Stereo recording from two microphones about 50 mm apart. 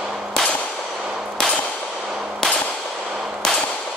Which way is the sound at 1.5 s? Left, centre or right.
Left.